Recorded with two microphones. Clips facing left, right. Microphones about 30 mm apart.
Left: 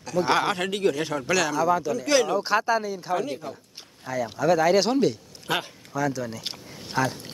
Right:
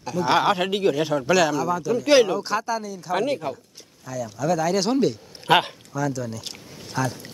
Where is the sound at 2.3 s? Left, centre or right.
Centre.